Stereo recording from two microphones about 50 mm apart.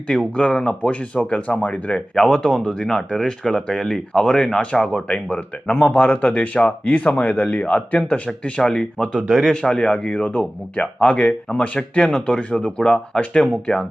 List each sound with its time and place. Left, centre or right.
0.1 s speech: centre
2.1 s speech: centre